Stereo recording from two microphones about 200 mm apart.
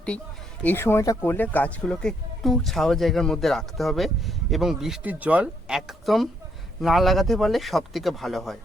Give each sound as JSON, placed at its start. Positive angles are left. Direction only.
{"t": 0.6, "sound": "speech", "side_deg": 10}